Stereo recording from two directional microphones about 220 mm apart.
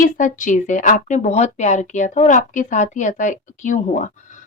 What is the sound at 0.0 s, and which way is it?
A woman's voice, 35° left (ahead or behind).